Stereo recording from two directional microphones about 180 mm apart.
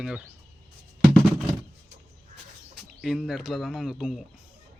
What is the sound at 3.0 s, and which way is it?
Speech, 5° right (ahead or behind).